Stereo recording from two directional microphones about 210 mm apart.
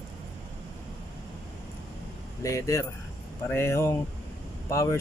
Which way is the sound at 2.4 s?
15° left (ahead or behind).